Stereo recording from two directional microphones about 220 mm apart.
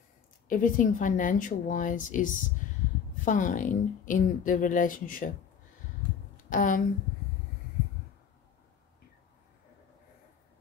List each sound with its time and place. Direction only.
0.5 s speech: 35° left (ahead or behind)
6.5 s speech: 35° left (ahead or behind)